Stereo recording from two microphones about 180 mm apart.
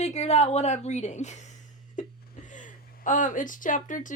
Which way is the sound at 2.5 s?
45° left (ahead or behind).